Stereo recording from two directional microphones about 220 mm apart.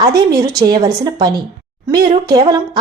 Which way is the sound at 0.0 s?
15° right (ahead or behind).